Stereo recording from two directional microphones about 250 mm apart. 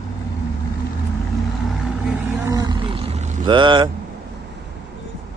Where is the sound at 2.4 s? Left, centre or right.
Centre.